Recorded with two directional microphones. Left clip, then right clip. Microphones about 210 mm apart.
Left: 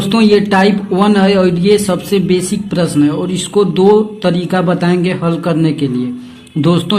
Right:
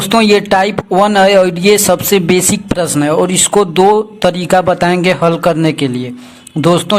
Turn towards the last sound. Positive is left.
turn(degrees=-30)  # may be behind; listen again after turning